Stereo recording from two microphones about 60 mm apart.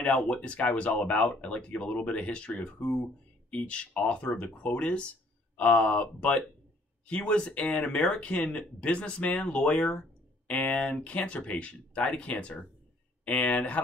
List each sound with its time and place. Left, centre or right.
0.0 s speech: centre